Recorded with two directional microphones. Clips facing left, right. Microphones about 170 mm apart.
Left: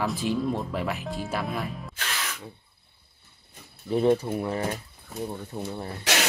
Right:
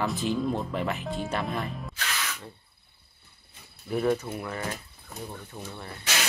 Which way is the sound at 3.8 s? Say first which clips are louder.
Left 4 dB; 30° left (ahead or behind).